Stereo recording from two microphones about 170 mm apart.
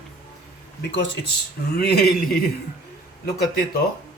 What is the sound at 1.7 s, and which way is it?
Speech, 70° left (ahead or behind).